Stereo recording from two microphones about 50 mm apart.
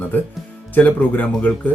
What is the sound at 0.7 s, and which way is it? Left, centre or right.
Speech, left.